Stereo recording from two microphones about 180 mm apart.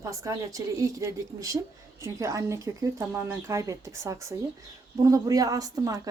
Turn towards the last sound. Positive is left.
turn(degrees=-20)  # may be behind; listen again after turning